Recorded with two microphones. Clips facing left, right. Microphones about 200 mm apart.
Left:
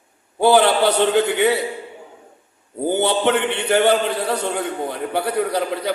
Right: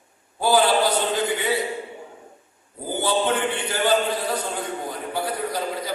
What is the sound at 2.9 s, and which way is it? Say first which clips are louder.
A man's voice: left 4 dB; 70° left (ahead or behind).